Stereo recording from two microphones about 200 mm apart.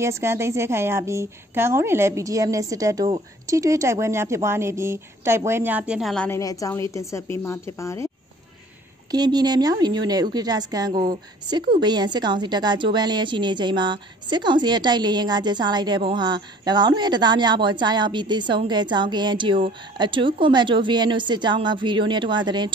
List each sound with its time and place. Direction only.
0.0 s a woman's voice: 15° right (ahead or behind); by 8.1 s 15° left (ahead or behind)
9.1 s a woman's voice: 20° right (ahead or behind)